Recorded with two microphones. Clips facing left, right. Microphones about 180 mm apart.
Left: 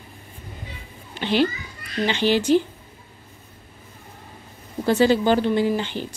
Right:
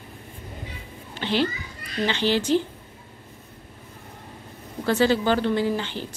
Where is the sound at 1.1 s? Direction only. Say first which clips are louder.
Left 3 dB; 15° left (ahead or behind).